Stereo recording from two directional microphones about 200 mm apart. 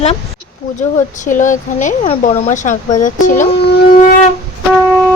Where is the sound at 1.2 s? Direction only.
40° left (ahead or behind).